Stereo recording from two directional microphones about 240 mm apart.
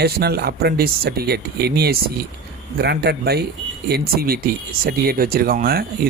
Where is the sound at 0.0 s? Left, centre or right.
Right.